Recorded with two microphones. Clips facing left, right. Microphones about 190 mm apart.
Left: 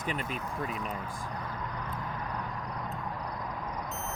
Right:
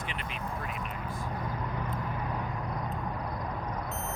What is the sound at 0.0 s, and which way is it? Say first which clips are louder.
Speech: left 3 dB; 45° left (ahead or behind).